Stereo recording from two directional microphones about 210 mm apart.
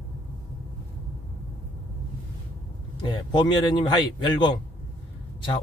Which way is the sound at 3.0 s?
20° left (ahead or behind).